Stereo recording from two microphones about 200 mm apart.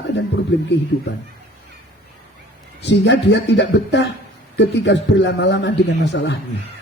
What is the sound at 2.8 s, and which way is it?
A man's voice, 65° left (ahead or behind).